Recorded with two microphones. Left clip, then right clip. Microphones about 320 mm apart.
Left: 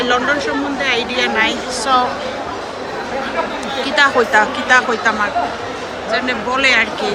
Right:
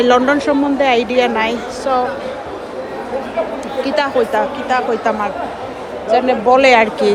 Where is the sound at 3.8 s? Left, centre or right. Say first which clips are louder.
Left 3 dB; centre.